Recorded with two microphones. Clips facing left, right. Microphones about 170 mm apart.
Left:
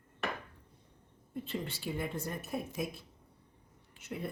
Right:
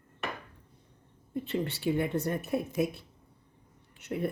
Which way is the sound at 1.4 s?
65° right (ahead or behind).